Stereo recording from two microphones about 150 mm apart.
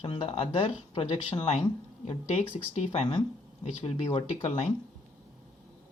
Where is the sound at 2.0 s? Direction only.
45° left (ahead or behind).